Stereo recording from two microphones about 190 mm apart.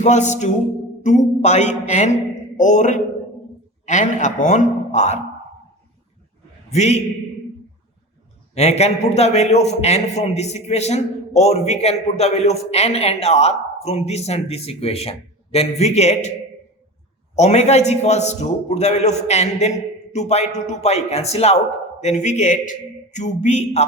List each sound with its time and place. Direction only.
0.0 s a man's voice: 40° left (ahead or behind)
6.7 s a man's voice: 35° left (ahead or behind)
8.5 s a man's voice: 35° left (ahead or behind)
17.3 s a man's voice: 35° left (ahead or behind)